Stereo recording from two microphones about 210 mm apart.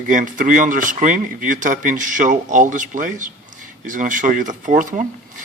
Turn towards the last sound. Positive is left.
turn(degrees=-40)  # may be behind; listen again after turning